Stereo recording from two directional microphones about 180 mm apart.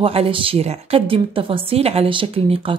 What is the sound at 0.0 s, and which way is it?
A woman's voice, 30° right (ahead or behind).